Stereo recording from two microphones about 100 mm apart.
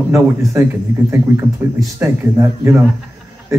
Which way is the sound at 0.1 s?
30° right (ahead or behind).